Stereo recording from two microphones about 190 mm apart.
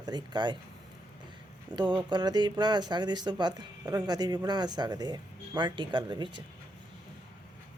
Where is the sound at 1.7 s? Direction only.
25° right (ahead or behind).